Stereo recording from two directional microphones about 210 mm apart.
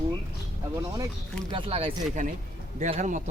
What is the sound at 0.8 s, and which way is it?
Speech, 15° right (ahead or behind).